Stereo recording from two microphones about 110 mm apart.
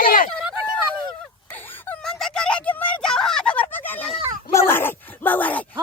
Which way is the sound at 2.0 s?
5° left (ahead or behind).